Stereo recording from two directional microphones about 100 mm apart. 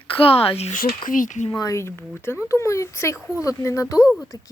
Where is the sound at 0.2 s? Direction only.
75° left (ahead or behind).